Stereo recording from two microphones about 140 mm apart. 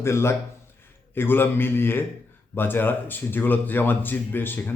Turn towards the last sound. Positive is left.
turn(degrees=15)  # may be behind; listen again after turning